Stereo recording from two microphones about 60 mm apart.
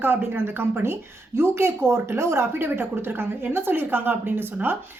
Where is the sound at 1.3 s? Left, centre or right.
Right.